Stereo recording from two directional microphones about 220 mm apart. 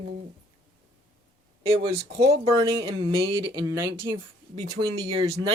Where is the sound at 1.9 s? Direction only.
30° right (ahead or behind).